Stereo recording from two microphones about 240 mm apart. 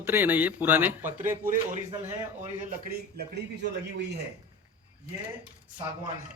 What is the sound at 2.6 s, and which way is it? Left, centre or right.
Speech, right.